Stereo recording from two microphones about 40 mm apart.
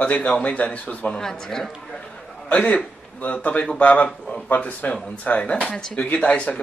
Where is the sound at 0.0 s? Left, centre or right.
Left.